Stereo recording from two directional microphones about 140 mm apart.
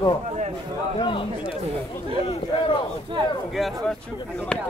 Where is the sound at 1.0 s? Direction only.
35° left (ahead or behind).